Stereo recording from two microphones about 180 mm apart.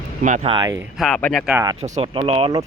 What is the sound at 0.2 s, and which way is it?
Speech, 45° right (ahead or behind).